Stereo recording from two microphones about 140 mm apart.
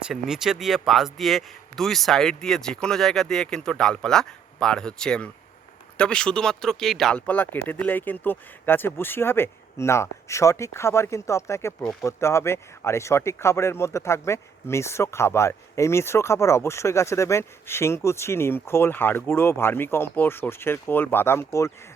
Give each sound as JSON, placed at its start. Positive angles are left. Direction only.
{"t": 0.0, "sound": "speech", "side_deg": -5}